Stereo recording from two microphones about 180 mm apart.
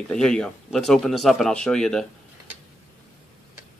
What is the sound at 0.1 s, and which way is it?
Speech, 5° left (ahead or behind).